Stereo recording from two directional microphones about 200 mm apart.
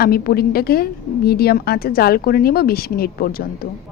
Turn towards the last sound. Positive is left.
turn(degrees=50)  # may be behind; listen again after turning